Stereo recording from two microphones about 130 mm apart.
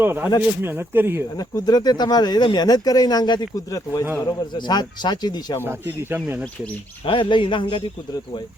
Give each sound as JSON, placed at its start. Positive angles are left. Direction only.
{"t": 0.0, "sound": "speech", "side_deg": -15}
{"t": 1.4, "sound": "speech", "side_deg": 30}
{"t": 5.6, "sound": "speech", "side_deg": -15}
{"t": 7.0, "sound": "speech", "side_deg": 40}